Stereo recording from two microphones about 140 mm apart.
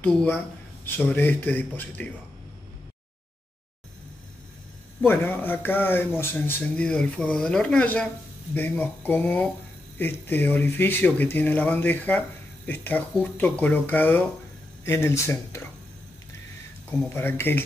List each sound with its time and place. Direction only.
0.0 s speech: 10° left (ahead or behind)
5.0 s speech: 15° left (ahead or behind)
17.1 s speech: 15° left (ahead or behind)